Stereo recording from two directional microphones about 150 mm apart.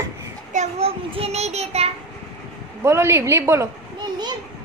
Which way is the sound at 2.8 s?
20° right (ahead or behind).